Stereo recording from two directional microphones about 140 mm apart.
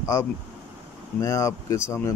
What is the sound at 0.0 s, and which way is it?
Speech, 20° left (ahead or behind).